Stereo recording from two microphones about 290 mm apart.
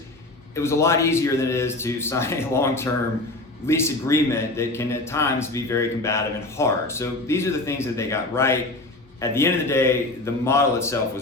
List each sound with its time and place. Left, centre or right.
0.5 s speech: centre